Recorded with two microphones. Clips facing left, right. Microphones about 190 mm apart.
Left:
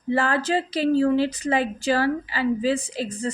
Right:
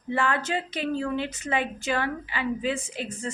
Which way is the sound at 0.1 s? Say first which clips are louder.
Left 5 dB; 35° left (ahead or behind).